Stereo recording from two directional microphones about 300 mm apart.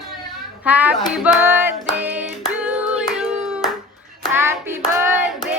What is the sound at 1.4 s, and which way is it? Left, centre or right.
Music, centre.